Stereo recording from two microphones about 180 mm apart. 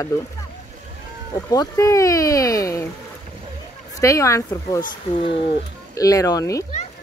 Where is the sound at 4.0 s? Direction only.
15° left (ahead or behind).